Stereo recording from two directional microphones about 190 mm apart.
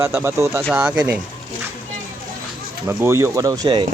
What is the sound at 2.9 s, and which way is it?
Speech, 10° right (ahead or behind).